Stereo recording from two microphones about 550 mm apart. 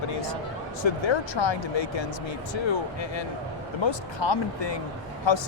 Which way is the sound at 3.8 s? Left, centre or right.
Left.